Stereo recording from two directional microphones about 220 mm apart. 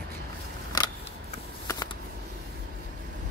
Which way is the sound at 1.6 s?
15° left (ahead or behind).